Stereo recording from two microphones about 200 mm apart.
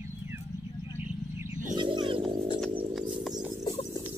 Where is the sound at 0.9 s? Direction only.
10° right (ahead or behind).